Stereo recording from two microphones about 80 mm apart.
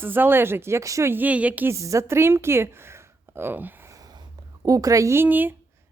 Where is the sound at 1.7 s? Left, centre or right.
Right.